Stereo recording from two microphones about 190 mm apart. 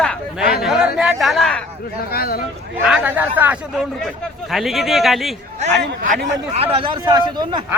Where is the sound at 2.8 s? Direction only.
5° right (ahead or behind).